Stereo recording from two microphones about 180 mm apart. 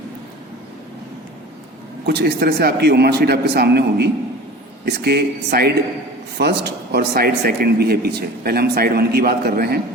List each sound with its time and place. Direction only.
2.0 s a man's voice: 65° right (ahead or behind)